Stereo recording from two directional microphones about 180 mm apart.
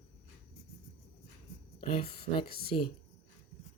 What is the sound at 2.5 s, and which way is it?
Speech, 60° left (ahead or behind).